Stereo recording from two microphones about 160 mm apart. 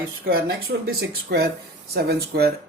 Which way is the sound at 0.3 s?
70° right (ahead or behind).